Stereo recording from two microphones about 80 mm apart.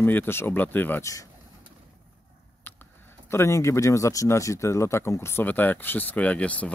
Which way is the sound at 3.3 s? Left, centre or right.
Left.